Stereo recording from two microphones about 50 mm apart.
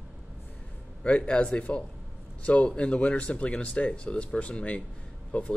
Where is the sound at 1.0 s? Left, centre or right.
Left.